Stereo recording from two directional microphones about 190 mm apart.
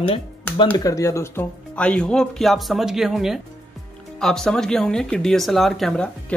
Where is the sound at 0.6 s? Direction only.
20° left (ahead or behind).